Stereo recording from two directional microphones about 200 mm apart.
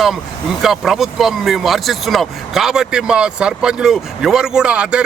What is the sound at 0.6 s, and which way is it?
Speech, centre (ahead or behind).